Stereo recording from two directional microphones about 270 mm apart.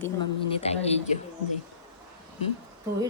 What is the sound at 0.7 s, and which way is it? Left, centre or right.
Speech, left.